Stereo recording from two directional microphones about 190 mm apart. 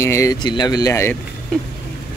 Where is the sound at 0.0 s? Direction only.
15° left (ahead or behind).